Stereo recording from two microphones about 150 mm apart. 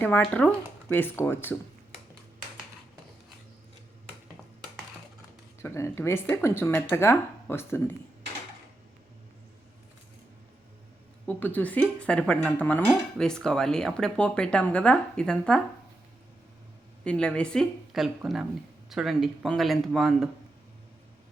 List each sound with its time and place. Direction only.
0.0 s speech: 10° left (ahead or behind)
5.6 s speech: 15° left (ahead or behind)
11.3 s speech: 10° left (ahead or behind)
17.0 s speech: 5° left (ahead or behind)